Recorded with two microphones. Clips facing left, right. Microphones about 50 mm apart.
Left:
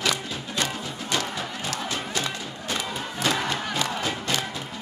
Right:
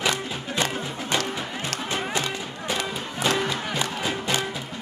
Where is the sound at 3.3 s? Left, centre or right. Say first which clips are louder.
Right 1 dB; centre.